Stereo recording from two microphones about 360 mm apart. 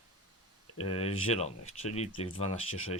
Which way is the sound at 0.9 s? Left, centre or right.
Centre.